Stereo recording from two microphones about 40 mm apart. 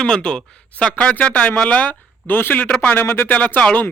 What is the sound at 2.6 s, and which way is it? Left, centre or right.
Speech, left.